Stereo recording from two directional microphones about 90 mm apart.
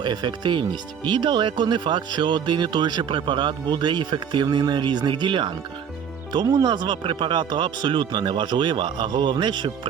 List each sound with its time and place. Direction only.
0.0 s speech: 55° right (ahead or behind)
6.3 s speech: 50° right (ahead or behind)